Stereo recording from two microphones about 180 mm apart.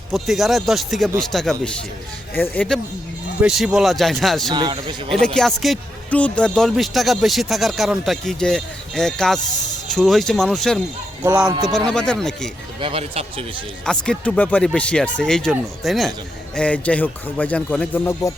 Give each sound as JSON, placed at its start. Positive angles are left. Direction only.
{"t": 0.1, "sound": "speech", "side_deg": 0}
{"t": 4.5, "sound": "speech", "side_deg": -25}
{"t": 5.2, "sound": "speech", "side_deg": 5}
{"t": 11.2, "sound": "speech", "side_deg": -20}
{"t": 11.9, "sound": "speech", "side_deg": 5}
{"t": 12.8, "sound": "speech", "side_deg": -30}
{"t": 13.8, "sound": "speech", "side_deg": 5}